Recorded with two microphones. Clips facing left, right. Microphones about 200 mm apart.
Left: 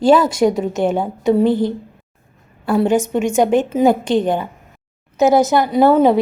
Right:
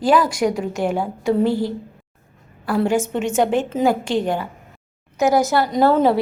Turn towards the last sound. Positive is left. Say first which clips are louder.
# left 4 dB
turn(degrees=15)  # may be behind; listen again after turning